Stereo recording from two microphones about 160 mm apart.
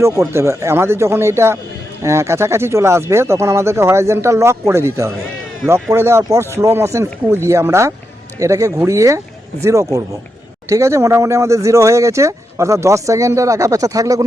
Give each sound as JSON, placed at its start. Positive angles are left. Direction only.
{"t": 0.0, "sound": "speech", "side_deg": -15}